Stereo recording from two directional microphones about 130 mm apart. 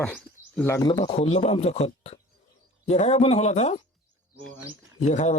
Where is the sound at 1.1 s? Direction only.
60° left (ahead or behind).